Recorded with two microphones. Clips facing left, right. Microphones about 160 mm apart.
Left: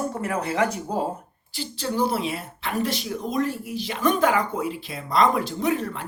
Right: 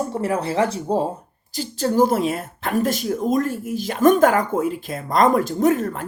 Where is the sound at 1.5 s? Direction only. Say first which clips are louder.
Right 7 dB; 45° right (ahead or behind).